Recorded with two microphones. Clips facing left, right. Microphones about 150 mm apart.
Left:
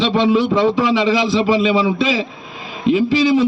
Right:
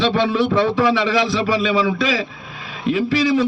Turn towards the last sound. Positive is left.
turn(degrees=20)  # may be behind; listen again after turning